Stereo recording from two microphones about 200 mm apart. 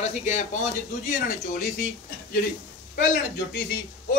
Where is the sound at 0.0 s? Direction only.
35° left (ahead or behind).